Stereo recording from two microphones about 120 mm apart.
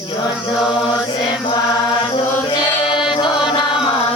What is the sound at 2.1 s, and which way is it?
Music, 40° left (ahead or behind).